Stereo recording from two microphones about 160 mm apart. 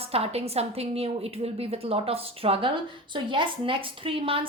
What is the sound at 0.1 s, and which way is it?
Speech, 40° right (ahead or behind).